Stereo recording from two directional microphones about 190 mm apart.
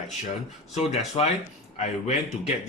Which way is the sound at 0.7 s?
35° left (ahead or behind).